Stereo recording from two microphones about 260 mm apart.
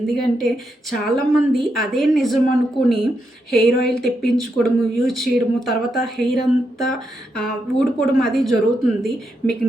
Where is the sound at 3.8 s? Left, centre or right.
Centre.